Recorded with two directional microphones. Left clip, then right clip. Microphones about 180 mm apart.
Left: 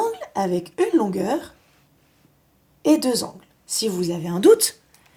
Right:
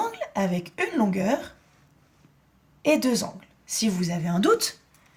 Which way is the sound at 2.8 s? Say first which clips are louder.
Left 3 dB; 30° left (ahead or behind).